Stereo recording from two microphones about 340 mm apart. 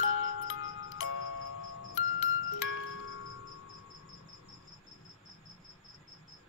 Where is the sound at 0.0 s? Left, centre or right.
Left.